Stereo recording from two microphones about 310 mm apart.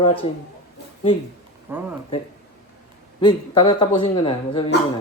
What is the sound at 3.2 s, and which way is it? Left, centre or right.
Speech, centre.